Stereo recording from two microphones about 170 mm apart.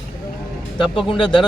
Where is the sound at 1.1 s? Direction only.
30° left (ahead or behind).